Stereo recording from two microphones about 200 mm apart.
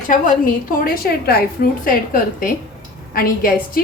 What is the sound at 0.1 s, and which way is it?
A woman's voice, 40° left (ahead or behind).